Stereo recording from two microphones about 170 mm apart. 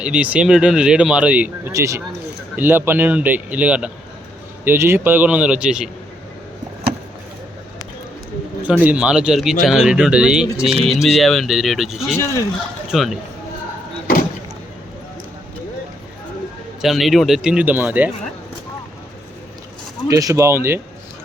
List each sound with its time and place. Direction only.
0.0 s speech: 5° right (ahead or behind)
8.8 s speech: 5° right (ahead or behind)
12.1 s speech: 15° left (ahead or behind)
12.9 s speech: centre (ahead or behind)
16.8 s speech: centre (ahead or behind)
20.1 s speech: 20° right (ahead or behind)